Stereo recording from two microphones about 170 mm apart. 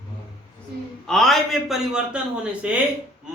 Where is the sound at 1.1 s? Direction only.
Centre (ahead or behind).